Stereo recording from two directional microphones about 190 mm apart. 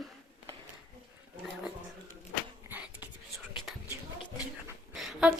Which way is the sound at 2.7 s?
10° right (ahead or behind).